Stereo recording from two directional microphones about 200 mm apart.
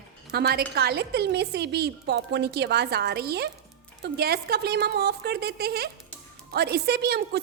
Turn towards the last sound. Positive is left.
turn(degrees=-55)  # may be behind; listen again after turning